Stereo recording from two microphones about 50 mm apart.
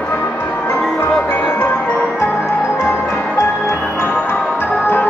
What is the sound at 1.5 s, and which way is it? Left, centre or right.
Music, left.